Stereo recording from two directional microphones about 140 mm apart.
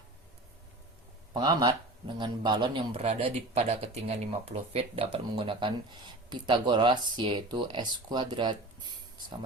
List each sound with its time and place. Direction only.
1.3 s speech: 30° right (ahead or behind)